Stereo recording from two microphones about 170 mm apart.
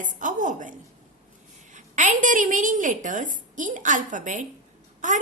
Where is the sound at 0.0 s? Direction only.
50° right (ahead or behind).